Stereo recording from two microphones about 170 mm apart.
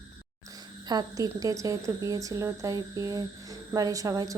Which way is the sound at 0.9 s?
20° right (ahead or behind).